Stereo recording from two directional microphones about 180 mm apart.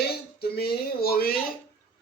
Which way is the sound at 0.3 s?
60° left (ahead or behind).